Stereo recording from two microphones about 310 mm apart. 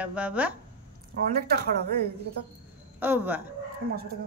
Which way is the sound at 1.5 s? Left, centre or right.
Right.